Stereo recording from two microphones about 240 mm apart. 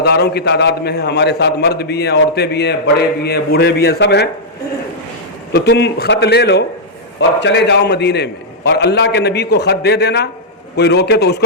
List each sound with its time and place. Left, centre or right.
0.0 s a man's voice: left
5.5 s a man's voice: left